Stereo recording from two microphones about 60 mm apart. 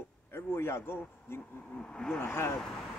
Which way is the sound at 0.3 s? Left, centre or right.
Left.